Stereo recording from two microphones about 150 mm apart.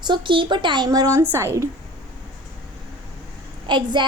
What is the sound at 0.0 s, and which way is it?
A woman's voice, 30° right (ahead or behind).